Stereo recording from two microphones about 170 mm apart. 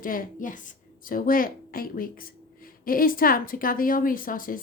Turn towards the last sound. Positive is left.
turn(degrees=55)  # may be behind; listen again after turning